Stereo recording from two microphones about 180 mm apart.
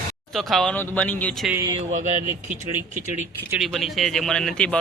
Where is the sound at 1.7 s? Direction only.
40° right (ahead or behind).